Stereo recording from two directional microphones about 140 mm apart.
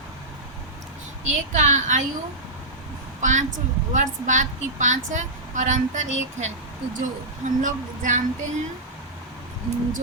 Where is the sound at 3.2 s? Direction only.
60° right (ahead or behind).